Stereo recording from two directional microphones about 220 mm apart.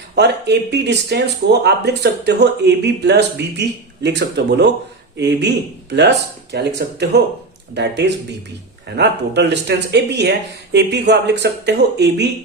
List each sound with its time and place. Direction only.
0.2 s speech: 50° right (ahead or behind)